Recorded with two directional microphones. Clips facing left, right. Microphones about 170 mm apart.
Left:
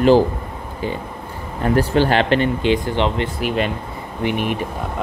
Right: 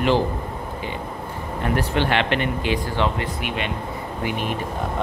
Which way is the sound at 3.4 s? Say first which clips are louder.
Left 7 dB; 40° left (ahead or behind).